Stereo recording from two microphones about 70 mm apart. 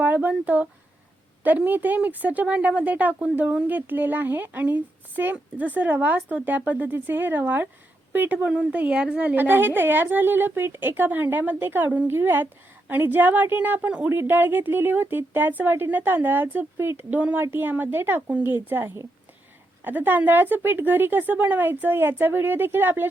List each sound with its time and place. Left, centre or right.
0.0 s a woman's voice: right
9.3 s speech: right
17.2 s speech: right
17.4 s speech: right